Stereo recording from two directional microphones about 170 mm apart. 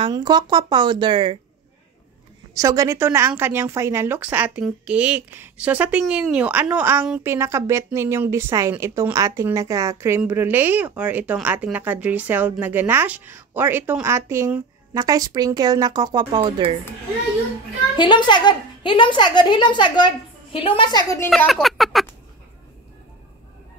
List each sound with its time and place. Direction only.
0.0 s speech: 25° right (ahead or behind)
2.5 s speech: 20° right (ahead or behind)
17.9 s a woman's voice: 25° left (ahead or behind)
21.3 s speech: centre (ahead or behind)